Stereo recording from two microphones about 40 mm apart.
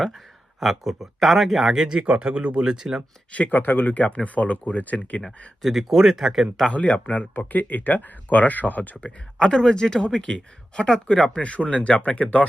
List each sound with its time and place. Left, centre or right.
0.6 s speech: centre
1.7 s speech: centre
2.6 s speech: centre
3.5 s speech: left
5.9 s speech: centre
6.7 s speech: left
7.3 s speech: left
9.0 s speech: left